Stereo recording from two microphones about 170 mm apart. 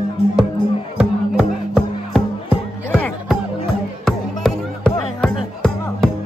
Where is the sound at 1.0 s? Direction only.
5° right (ahead or behind).